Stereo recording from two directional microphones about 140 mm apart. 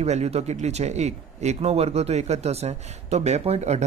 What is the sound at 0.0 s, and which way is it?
A man's voice, 50° right (ahead or behind).